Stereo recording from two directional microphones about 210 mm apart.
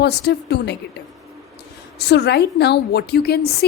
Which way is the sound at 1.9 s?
50° left (ahead or behind).